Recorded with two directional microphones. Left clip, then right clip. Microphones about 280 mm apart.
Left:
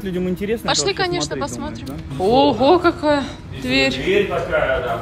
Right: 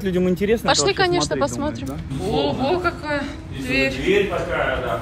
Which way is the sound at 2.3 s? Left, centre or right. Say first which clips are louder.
Left 7 dB; centre.